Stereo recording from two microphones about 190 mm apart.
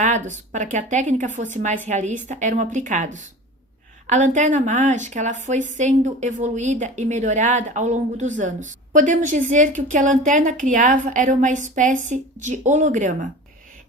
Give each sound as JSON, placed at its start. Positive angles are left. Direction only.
{"t": 0.0, "sound": "speech", "side_deg": -40}